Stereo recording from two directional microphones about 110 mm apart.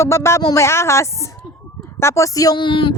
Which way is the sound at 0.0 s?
25° left (ahead or behind).